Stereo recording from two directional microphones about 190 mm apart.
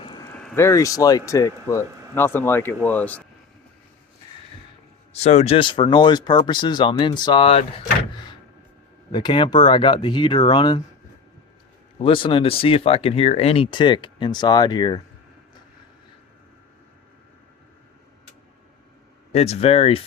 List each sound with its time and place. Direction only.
0.0 s a sound: 25° left (ahead or behind)
0.3 s a man's voice: 10° left (ahead or behind)
5.1 s speech: 35° left (ahead or behind)
9.1 s speech: 25° left (ahead or behind)
12.0 s speech: 30° left (ahead or behind)
19.3 s speech: 35° left (ahead or behind)